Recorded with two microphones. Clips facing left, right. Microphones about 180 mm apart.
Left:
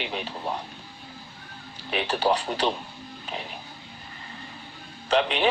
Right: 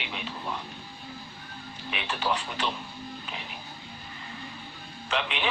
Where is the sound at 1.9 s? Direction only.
40° left (ahead or behind).